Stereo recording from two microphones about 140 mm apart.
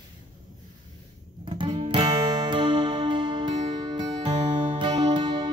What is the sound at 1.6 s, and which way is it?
Music, 35° right (ahead or behind).